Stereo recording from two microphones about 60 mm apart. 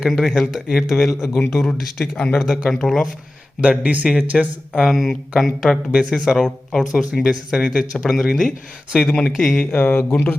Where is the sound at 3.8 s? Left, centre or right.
Right.